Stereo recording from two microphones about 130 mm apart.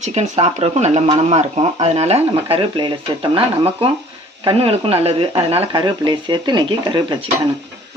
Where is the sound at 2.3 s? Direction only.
40° right (ahead or behind).